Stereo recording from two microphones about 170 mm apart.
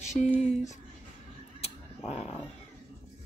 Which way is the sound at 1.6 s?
40° left (ahead or behind).